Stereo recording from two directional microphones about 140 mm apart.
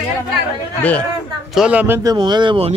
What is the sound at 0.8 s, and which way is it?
Speech, 10° left (ahead or behind).